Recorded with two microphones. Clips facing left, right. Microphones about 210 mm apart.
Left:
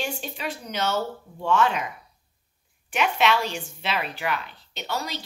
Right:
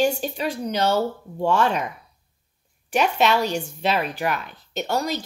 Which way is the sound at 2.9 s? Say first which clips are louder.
Right 3 dB; 40° right (ahead or behind).